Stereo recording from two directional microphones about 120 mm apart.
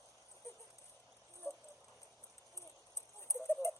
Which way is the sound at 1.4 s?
20° left (ahead or behind).